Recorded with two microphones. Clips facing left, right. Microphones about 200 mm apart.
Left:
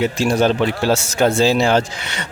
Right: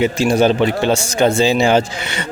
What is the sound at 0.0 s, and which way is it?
Speech, centre (ahead or behind).